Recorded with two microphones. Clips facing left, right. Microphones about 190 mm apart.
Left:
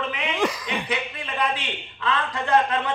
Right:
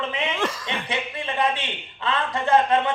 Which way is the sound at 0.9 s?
25° right (ahead or behind).